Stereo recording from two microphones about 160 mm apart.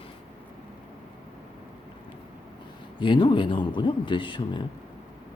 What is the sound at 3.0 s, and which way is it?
Speech, 30° left (ahead or behind).